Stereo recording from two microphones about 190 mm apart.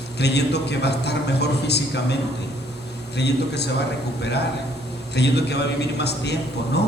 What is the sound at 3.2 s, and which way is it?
A man's voice, 60° left (ahead or behind).